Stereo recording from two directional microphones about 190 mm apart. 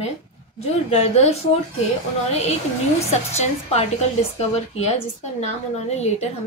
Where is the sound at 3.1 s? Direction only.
35° left (ahead or behind).